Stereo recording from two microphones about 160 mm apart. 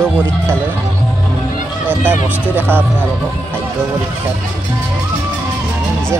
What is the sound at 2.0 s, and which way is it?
Speech, 15° right (ahead or behind).